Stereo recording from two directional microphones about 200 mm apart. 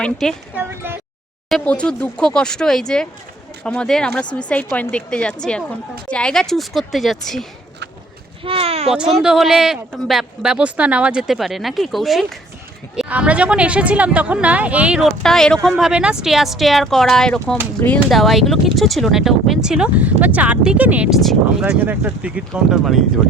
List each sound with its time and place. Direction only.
0.0 s speech: 5° left (ahead or behind)
0.5 s speech: 10° right (ahead or behind)
1.5 s speech: 5° left (ahead or behind)
8.4 s a sound: 30° right (ahead or behind)
8.9 s speech: 5° right (ahead or behind)